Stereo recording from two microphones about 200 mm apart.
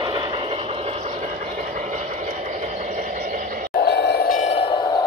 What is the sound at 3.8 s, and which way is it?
Train, 55° left (ahead or behind).